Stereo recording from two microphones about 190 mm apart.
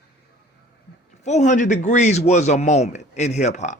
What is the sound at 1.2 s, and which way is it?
A man's voice, 40° left (ahead or behind).